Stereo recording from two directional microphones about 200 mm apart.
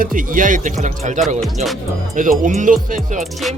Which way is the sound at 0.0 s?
45° right (ahead or behind).